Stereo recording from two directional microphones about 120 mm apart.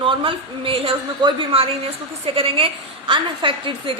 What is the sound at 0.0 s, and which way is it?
A woman's voice, 45° right (ahead or behind).